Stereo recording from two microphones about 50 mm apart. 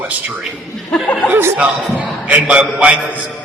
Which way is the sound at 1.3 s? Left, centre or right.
Right.